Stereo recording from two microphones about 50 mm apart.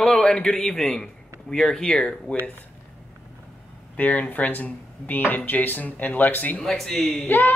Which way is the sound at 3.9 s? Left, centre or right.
Left.